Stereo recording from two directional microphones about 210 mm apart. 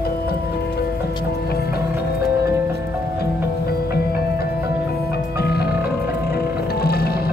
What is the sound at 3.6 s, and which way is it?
Music, 50° left (ahead or behind).